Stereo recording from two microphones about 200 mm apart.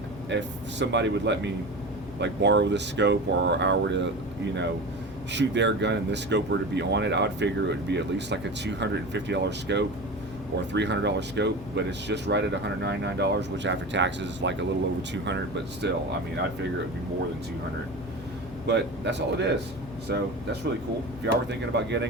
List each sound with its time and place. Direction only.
0.3 s speech: 60° right (ahead or behind)
5.3 s speech: 60° right (ahead or behind)
18.6 s speech: 60° right (ahead or behind)